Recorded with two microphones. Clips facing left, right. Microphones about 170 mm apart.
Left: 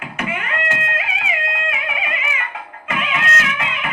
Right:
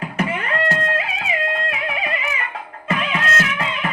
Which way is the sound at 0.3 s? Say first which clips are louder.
Right 3 dB; 35° right (ahead or behind).